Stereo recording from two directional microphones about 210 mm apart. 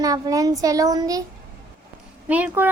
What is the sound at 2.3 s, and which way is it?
Speech, 5° right (ahead or behind).